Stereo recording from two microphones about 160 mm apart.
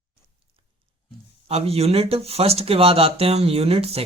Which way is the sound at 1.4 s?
40° right (ahead or behind).